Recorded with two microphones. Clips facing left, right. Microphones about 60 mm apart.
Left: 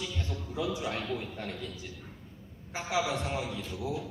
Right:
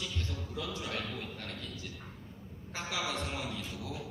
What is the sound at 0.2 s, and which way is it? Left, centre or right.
A man's voice, centre.